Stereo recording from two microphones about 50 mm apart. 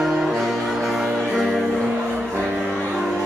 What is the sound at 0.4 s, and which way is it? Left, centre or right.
Music, centre.